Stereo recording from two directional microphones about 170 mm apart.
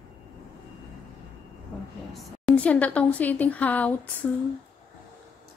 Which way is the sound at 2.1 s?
Centre (ahead or behind).